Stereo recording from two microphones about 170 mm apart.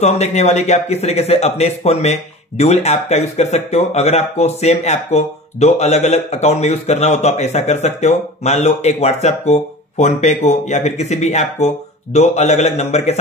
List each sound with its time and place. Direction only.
0.0 s a man's voice: 40° left (ahead or behind)